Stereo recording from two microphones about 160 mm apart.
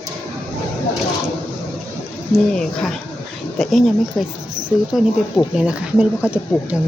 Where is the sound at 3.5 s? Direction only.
Centre (ahead or behind).